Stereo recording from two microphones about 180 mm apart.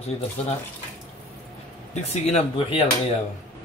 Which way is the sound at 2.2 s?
30° left (ahead or behind).